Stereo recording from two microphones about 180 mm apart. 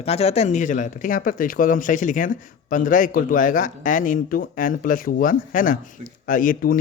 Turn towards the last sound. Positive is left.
turn(degrees=50)  # may be behind; listen again after turning